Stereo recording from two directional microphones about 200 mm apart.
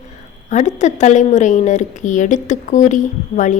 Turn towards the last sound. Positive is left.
turn(degrees=40)  # may be behind; listen again after turning